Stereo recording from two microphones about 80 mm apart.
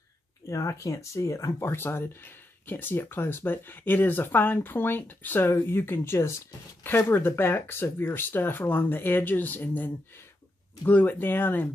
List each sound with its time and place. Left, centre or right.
0.5 s speech: left
10.9 s speech: left